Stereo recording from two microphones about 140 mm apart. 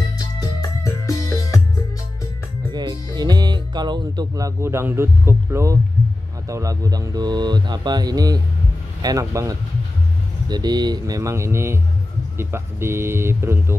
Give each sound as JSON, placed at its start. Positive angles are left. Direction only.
{"t": 0.2, "sound": "music", "side_deg": 25}
{"t": 2.7, "sound": "music", "side_deg": -30}
{"t": 3.2, "sound": "speech", "side_deg": -30}